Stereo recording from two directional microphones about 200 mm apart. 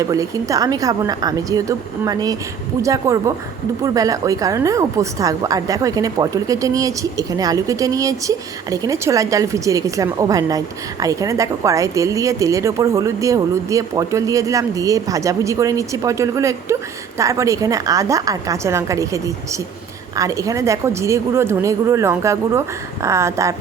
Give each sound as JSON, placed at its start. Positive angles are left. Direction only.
{"t": 0.0, "sound": "a woman's voice", "side_deg": -15}